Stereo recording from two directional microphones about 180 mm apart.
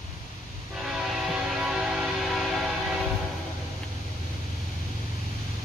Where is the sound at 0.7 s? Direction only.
5° right (ahead or behind).